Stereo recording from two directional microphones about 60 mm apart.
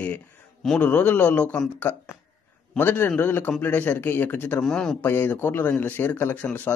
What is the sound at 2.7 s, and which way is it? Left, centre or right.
Speech, left.